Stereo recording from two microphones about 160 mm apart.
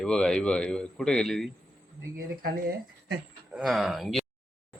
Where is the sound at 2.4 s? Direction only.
75° right (ahead or behind).